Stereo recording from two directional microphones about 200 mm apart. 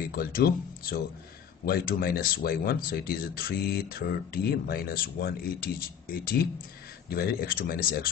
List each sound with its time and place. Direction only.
0.1 s speech: 50° left (ahead or behind)